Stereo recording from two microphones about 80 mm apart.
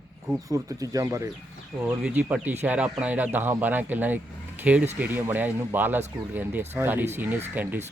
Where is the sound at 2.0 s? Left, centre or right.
Centre.